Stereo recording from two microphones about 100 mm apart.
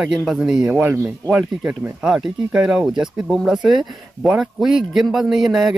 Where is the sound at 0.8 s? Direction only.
25° right (ahead or behind).